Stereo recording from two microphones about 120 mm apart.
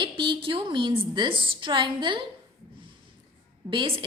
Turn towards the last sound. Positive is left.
turn(degrees=-45)  # may be behind; listen again after turning